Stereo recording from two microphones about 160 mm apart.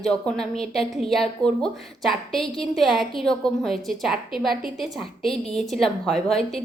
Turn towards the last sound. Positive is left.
turn(degrees=40)  # may be behind; listen again after turning